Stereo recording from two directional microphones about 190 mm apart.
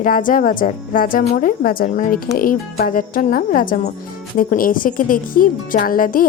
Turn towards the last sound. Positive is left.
turn(degrees=45)  # may be behind; listen again after turning